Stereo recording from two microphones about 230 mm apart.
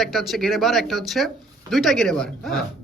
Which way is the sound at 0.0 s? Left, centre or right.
Centre.